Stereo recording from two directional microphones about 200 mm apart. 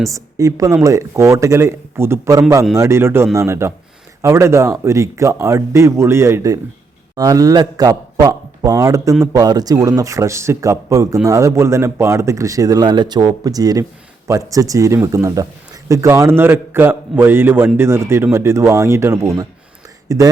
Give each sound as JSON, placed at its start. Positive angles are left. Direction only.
{"t": 0.1, "sound": "a man's voice", "side_deg": -15}